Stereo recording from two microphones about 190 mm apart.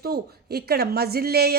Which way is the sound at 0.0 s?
55° right (ahead or behind).